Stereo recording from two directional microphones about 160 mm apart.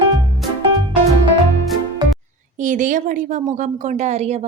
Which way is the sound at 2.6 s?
55° right (ahead or behind).